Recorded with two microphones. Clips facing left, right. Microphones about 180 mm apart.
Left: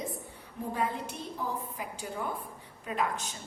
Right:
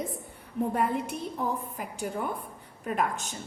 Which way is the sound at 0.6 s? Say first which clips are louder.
Right 5 dB; 65° right (ahead or behind).